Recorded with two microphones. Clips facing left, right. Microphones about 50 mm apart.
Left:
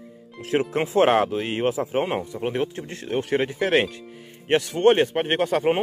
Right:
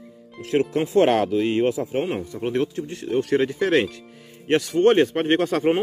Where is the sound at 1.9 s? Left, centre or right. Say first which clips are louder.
Left 1 dB; left.